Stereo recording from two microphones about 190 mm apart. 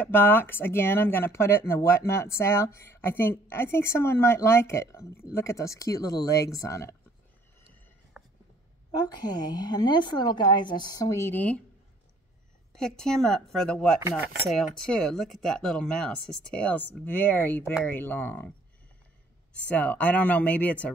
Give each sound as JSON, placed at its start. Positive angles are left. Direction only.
{"t": 0.0, "sound": "speech", "side_deg": 10}
{"t": 8.2, "sound": "a sound", "side_deg": 0}
{"t": 8.9, "sound": "a woman's voice", "side_deg": 20}
{"t": 12.7, "sound": "speech", "side_deg": 5}
{"t": 19.5, "sound": "speech", "side_deg": 5}